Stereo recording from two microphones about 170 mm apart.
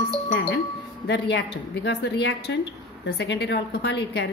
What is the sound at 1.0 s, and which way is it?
A woman's voice, 90° left.